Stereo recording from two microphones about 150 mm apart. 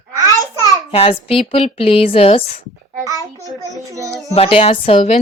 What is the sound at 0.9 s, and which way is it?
A woman's voice, 40° left (ahead or behind).